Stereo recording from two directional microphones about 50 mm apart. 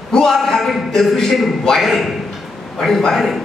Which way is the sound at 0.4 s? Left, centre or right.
Centre.